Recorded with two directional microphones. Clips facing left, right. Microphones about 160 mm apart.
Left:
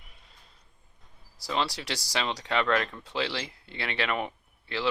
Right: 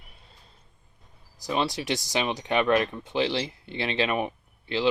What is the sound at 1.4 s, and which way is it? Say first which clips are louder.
Speech: right 3 dB; 20° right (ahead or behind).